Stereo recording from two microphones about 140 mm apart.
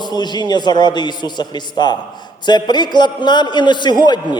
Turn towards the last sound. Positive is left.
turn(degrees=30)  # may be behind; listen again after turning